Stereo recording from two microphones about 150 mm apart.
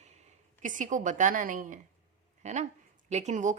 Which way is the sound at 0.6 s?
60° right (ahead or behind).